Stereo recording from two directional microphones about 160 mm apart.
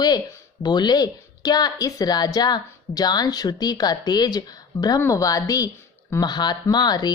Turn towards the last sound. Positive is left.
turn(degrees=25)  # may be behind; listen again after turning